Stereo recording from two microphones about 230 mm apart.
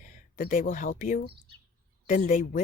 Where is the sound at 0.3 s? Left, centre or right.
Left.